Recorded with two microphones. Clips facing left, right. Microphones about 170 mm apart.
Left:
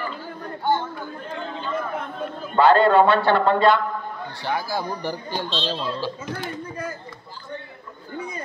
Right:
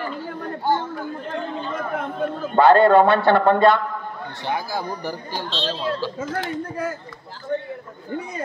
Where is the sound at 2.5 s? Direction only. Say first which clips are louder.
Right 2 dB; 50° right (ahead or behind).